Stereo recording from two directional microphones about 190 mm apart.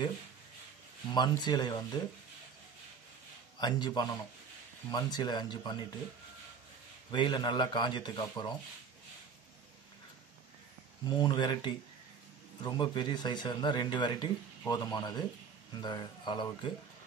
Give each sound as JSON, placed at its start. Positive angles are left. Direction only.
{"t": 1.1, "sound": "speech", "side_deg": 25}
{"t": 3.5, "sound": "speech", "side_deg": 20}
{"t": 7.1, "sound": "speech", "side_deg": 25}
{"t": 11.1, "sound": "speech", "side_deg": 20}